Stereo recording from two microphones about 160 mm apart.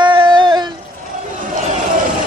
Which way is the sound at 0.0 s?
30° right (ahead or behind).